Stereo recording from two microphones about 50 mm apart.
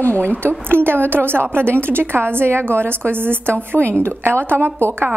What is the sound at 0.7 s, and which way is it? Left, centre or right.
A woman's voice, right.